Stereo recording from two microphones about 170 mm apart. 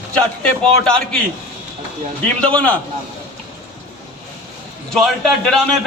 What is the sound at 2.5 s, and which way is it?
Speech, 10° left (ahead or behind).